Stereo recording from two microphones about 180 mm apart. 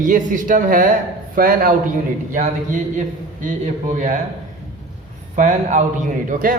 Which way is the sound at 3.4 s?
45° right (ahead or behind).